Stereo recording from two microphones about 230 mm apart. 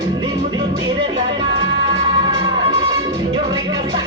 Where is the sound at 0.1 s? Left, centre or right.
Centre.